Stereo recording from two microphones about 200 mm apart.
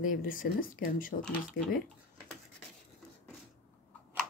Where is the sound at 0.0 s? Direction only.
45° left (ahead or behind).